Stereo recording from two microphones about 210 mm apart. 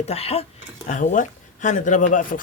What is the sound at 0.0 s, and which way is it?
Speech, 30° left (ahead or behind).